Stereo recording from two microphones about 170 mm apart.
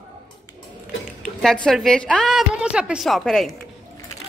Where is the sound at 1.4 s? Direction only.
Centre (ahead or behind).